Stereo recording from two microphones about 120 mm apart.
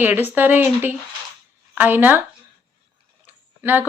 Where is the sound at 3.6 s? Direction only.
15° right (ahead or behind).